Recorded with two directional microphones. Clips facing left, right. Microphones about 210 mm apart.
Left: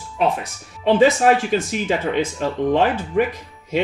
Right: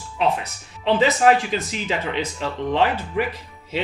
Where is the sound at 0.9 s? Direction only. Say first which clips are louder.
Left 2 dB; 50° left (ahead or behind).